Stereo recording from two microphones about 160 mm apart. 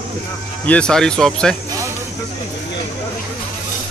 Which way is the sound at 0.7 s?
5° left (ahead or behind).